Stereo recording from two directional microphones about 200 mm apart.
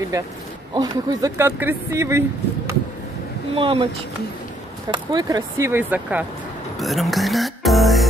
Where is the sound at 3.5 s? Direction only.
25° right (ahead or behind).